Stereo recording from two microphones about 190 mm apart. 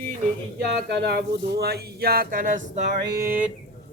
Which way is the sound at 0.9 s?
60° right (ahead or behind).